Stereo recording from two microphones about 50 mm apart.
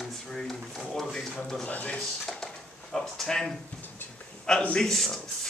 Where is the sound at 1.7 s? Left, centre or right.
Left.